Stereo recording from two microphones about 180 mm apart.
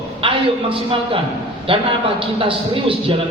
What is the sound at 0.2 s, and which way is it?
A man's voice, 30° right (ahead or behind).